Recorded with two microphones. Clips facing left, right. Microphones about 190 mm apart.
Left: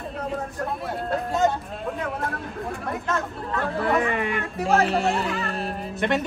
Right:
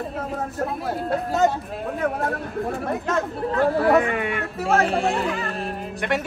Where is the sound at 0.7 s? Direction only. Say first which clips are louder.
Right 1 dB; centre (ahead or behind).